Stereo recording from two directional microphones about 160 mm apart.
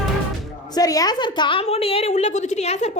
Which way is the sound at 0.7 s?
25° left (ahead or behind).